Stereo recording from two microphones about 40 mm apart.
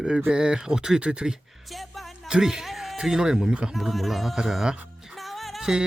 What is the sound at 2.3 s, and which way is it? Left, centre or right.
Speech, centre.